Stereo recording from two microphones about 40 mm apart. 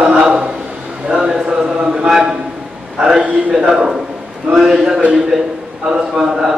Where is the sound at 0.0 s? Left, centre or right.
Centre.